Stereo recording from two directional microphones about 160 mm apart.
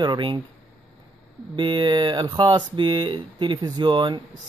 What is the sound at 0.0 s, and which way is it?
Speech, 30° right (ahead or behind).